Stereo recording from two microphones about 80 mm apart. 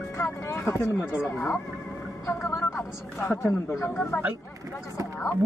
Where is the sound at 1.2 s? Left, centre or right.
Left.